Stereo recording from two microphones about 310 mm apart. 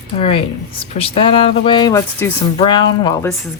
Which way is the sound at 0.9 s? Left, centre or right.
Centre.